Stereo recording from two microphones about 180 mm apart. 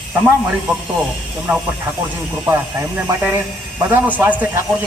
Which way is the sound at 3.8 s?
10° right (ahead or behind).